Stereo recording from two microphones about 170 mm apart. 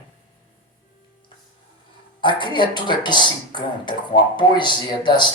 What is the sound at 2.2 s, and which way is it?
Speech, 30° left (ahead or behind).